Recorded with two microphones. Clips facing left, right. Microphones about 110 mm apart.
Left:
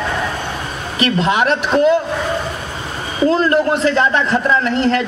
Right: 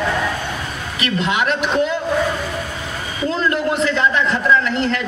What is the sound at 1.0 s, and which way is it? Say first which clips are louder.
Speech: left 4 dB; 35° left (ahead or behind).